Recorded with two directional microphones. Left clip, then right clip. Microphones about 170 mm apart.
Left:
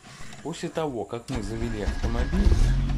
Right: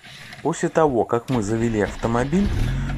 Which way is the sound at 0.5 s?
15° right (ahead or behind).